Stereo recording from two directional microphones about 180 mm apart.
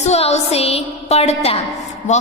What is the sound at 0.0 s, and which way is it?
A woman's voice, 35° left (ahead or behind).